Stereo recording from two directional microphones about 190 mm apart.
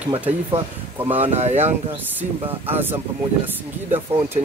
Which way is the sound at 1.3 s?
35° right (ahead or behind).